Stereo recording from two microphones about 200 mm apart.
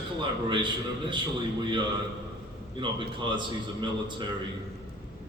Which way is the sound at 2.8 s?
25° right (ahead or behind).